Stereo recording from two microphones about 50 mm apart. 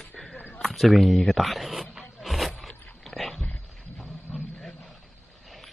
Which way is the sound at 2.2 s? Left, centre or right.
Centre.